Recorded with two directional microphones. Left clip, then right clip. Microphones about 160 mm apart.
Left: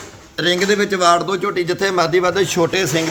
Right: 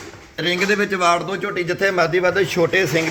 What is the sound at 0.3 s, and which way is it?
A man's voice, 5° left (ahead or behind).